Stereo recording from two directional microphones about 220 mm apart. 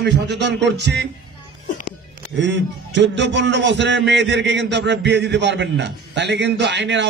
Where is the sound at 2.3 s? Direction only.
55° right (ahead or behind).